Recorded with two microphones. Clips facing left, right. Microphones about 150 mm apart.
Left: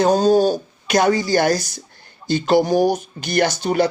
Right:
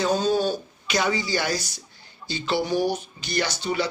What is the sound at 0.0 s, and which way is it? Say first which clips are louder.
Speech: left 8 dB; 40° left (ahead or behind).